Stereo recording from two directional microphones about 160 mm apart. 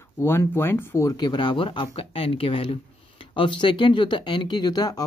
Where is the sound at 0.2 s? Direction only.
15° left (ahead or behind).